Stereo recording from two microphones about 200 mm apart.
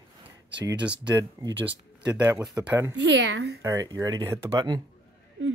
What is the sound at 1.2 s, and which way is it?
Speech, 20° right (ahead or behind).